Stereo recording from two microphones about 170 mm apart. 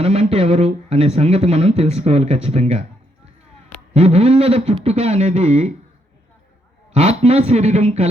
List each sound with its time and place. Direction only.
0.0 s speech: 35° right (ahead or behind)
3.9 s speech: 35° right (ahead or behind)
6.9 s speech: 35° right (ahead or behind)